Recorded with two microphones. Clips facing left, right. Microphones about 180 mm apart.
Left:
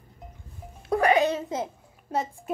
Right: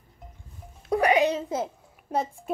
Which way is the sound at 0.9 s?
15° right (ahead or behind).